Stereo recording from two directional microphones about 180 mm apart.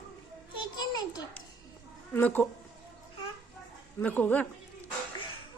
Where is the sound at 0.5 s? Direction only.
25° left (ahead or behind).